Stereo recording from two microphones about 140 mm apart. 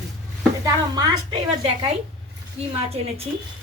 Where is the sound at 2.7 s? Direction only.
45° right (ahead or behind).